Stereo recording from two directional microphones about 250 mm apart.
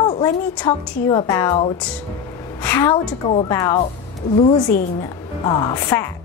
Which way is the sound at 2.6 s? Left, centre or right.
Centre.